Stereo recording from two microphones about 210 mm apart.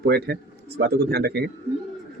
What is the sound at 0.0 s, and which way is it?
Speech, 50° right (ahead or behind).